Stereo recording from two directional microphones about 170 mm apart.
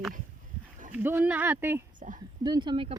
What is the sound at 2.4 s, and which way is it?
Speech, 25° right (ahead or behind).